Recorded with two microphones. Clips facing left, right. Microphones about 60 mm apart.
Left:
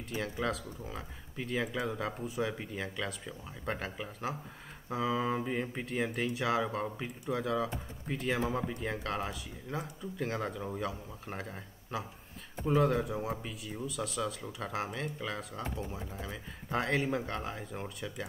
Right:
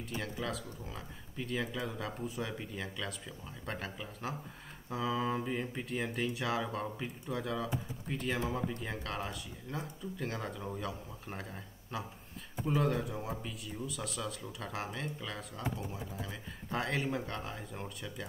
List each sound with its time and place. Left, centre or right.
0.1 s speech: centre
2.5 s speech: centre